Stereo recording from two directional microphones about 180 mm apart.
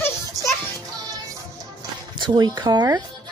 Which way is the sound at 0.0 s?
15° left (ahead or behind).